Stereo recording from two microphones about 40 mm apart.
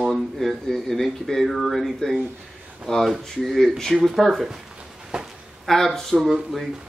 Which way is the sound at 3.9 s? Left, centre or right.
Centre.